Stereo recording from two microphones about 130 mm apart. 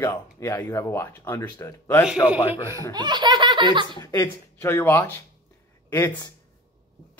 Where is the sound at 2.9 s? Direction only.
35° right (ahead or behind).